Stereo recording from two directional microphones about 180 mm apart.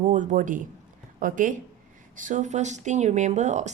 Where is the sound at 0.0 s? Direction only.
45° right (ahead or behind).